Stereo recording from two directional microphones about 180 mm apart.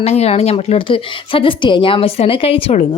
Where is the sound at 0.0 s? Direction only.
35° left (ahead or behind).